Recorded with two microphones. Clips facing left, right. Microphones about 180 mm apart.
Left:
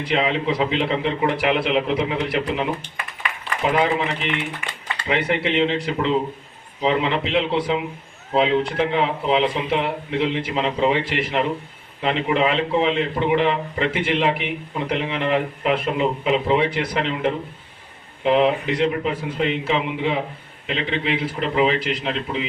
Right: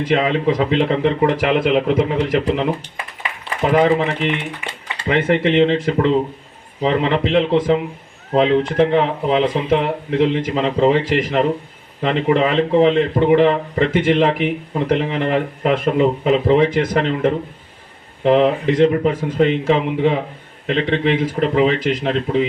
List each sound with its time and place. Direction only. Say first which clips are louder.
0.0 s a man's voice: right 5 dB; 45° right (ahead or behind)
4.6 s speech: right 3 dB; 20° right (ahead or behind)
5.0 s a man's voice: right 6 dB; 45° right (ahead or behind)